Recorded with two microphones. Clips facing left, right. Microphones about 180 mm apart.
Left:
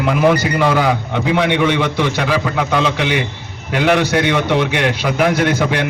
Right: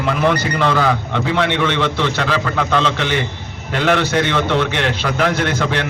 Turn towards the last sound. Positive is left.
turn(degrees=10)  # may be behind; listen again after turning